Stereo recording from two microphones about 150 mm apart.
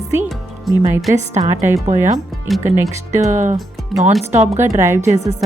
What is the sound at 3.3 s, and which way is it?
Speech, 55° right (ahead or behind).